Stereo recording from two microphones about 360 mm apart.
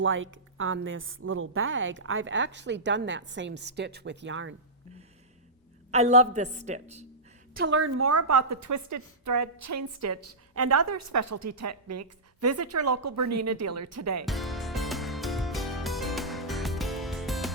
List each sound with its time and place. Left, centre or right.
0.0 s a woman's voice: right
5.9 s a woman's voice: centre
7.5 s a woman's voice: right
14.3 s music: centre